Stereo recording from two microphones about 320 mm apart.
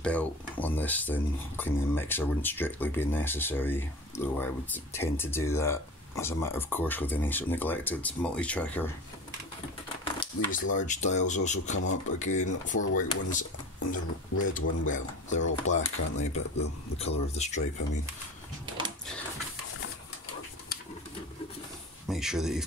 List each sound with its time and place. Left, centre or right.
0.0 s speech: centre
10.2 s speech: left
14.5 s speech: left
15.7 s speech: left
16.2 s speech: left
22.0 s speech: centre